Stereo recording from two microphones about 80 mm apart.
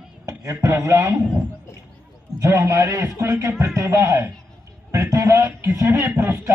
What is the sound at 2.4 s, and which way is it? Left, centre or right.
Speech, right.